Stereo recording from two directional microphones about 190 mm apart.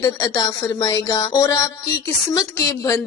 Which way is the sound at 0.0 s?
20° left (ahead or behind).